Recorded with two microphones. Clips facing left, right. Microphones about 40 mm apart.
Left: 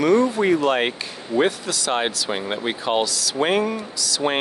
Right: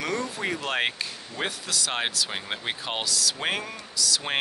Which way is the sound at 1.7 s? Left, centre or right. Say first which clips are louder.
Left 6 dB; centre.